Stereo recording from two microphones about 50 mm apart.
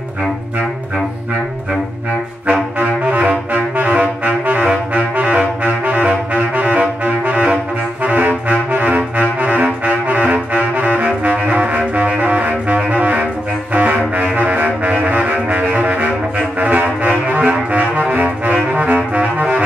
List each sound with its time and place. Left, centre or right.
2.4 s brass instrument: right
4.6 s saxophone: right